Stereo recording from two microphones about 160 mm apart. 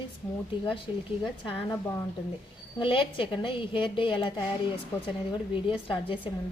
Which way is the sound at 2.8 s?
35° left (ahead or behind).